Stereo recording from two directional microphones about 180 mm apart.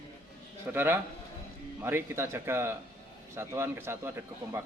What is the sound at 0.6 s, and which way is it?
A man's voice, 10° right (ahead or behind).